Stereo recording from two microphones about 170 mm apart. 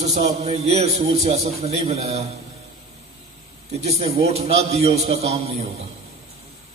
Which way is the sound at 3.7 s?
40° right (ahead or behind).